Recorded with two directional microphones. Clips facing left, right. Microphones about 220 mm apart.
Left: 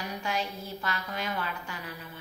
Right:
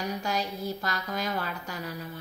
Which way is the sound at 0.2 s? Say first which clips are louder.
Right 3 dB; 40° right (ahead or behind).